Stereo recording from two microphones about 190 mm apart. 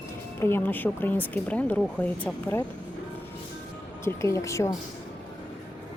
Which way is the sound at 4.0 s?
15° left (ahead or behind).